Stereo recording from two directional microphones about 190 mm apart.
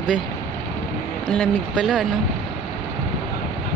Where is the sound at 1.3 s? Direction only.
5° left (ahead or behind).